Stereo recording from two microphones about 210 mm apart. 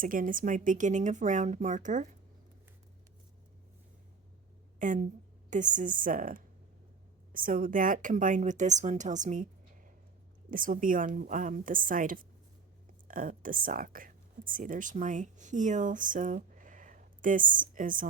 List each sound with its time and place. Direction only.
0.0 s a woman's voice: 40° right (ahead or behind)
4.8 s a woman's voice: 35° right (ahead or behind)